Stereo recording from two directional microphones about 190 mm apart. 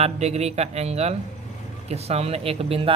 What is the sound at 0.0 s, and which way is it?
Speech, 35° right (ahead or behind).